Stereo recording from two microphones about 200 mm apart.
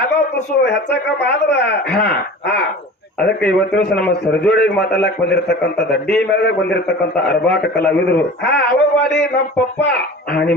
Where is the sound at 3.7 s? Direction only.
55° left (ahead or behind).